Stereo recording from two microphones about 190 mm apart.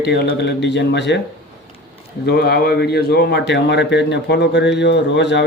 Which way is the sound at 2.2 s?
55° left (ahead or behind).